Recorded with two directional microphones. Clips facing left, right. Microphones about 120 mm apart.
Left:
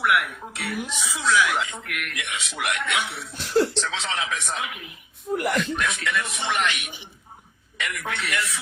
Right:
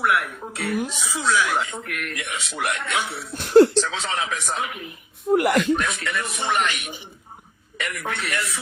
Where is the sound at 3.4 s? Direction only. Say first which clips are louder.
Right 8 dB; 55° right (ahead or behind).